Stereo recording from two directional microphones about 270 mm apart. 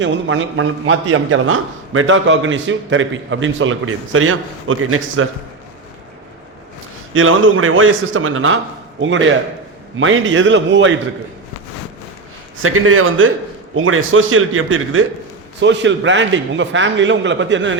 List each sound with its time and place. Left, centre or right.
0.0 s a man's voice: right
7.1 s a man's voice: right
12.6 s a man's voice: right